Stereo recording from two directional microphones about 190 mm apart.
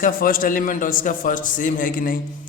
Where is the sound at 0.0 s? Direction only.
45° left (ahead or behind).